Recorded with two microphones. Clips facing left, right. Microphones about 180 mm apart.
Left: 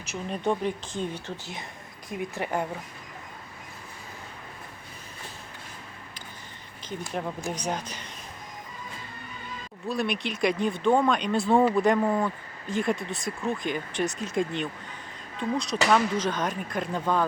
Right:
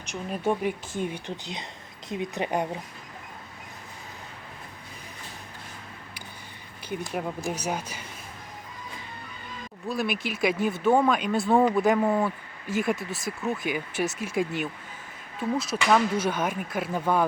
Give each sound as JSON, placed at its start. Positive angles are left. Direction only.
{"t": 0.0, "sound": "speech", "side_deg": 5}
{"t": 0.4, "sound": "a woman's voice", "side_deg": -10}
{"t": 7.1, "sound": "speech", "side_deg": -5}
{"t": 9.9, "sound": "speech", "side_deg": -5}